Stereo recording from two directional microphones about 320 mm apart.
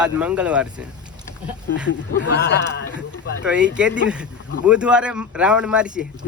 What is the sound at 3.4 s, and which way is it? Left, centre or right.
Speech, centre.